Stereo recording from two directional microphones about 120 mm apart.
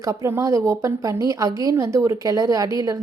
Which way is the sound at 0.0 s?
25° right (ahead or behind).